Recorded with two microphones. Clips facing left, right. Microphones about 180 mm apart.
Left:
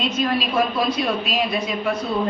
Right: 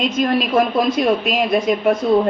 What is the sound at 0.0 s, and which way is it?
Speech, 50° right (ahead or behind).